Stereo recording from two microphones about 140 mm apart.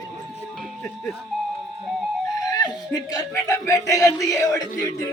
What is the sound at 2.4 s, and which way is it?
Chuckle, 25° left (ahead or behind).